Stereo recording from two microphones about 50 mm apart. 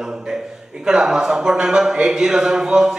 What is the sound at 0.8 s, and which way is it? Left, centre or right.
A man's voice, centre.